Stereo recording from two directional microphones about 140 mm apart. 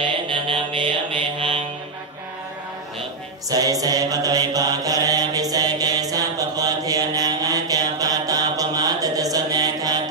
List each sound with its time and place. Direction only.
0.0 s mantra: 35° right (ahead or behind)
3.4 s mantra: 25° right (ahead or behind)